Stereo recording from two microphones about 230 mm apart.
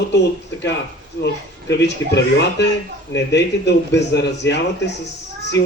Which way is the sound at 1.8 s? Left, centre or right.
Left.